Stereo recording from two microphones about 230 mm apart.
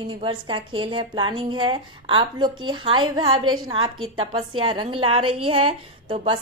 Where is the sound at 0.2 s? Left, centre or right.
Right.